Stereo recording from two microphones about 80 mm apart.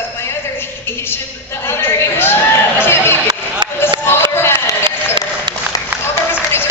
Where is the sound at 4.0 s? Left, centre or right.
Left.